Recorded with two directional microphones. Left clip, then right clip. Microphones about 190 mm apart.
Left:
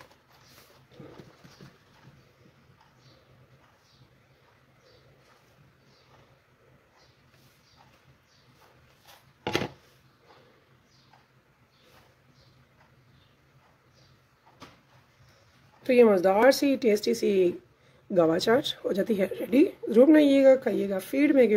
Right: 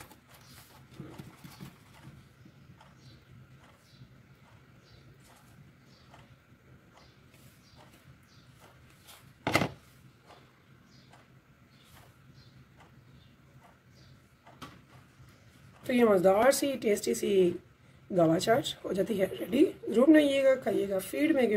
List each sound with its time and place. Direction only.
15.9 s a woman's voice: 45° left (ahead or behind)